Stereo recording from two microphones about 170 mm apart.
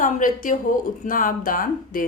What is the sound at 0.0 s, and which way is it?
A woman's voice, 50° left (ahead or behind).